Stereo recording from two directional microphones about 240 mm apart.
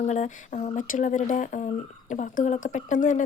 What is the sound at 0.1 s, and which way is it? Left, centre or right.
Speech, left.